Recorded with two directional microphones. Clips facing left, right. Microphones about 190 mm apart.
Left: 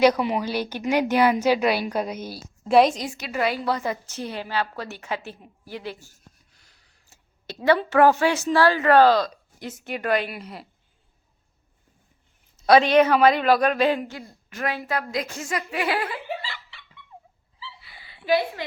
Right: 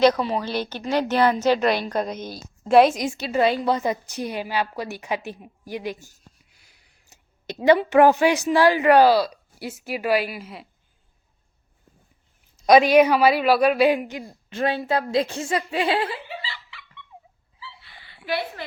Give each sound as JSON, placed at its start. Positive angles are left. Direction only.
{"t": 0.0, "sound": "a woman's voice", "side_deg": 15}
{"t": 3.1, "sound": "a woman's voice", "side_deg": -30}
{"t": 12.5, "sound": "a man's voice", "side_deg": -15}